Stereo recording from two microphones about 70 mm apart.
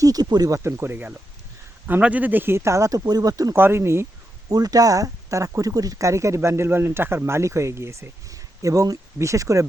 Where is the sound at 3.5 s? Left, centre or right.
Right.